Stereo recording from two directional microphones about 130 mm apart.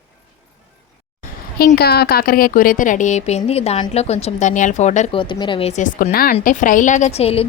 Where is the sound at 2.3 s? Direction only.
90° left; by 5.1 s 65° left (ahead or behind).